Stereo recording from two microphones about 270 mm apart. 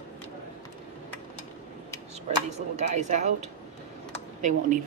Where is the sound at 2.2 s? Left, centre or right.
Right.